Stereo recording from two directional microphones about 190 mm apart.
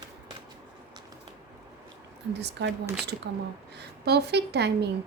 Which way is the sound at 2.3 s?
65° right (ahead or behind).